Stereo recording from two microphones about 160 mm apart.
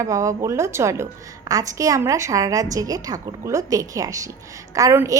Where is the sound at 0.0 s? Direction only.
20° right (ahead or behind).